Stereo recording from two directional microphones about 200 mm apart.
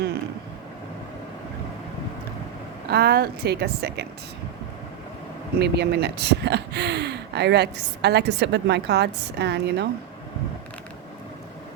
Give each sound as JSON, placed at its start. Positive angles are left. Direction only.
{"t": 2.8, "sound": "a woman's voice", "side_deg": -50}
{"t": 5.5, "sound": "speech", "side_deg": -55}